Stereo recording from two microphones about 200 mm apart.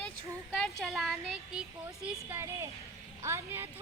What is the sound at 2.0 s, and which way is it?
A woman's voice, 10° right (ahead or behind).